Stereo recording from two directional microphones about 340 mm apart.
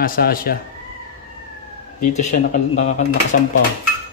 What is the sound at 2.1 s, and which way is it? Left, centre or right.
Speech, centre.